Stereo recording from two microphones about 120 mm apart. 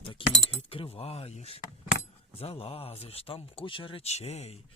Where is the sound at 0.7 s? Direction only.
50° left (ahead or behind).